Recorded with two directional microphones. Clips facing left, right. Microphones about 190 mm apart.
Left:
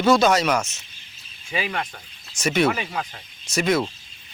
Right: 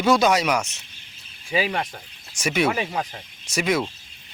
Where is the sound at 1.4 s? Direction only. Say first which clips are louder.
Right 4 dB; 30° right (ahead or behind).